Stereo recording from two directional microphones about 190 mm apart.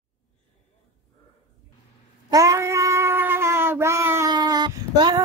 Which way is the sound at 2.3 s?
15° right (ahead or behind).